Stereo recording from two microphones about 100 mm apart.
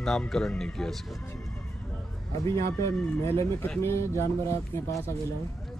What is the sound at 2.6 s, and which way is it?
A man's voice, 35° left (ahead or behind).